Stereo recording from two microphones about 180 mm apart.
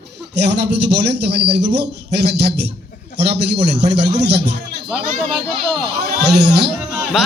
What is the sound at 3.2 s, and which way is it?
A man's voice, 70° right (ahead or behind).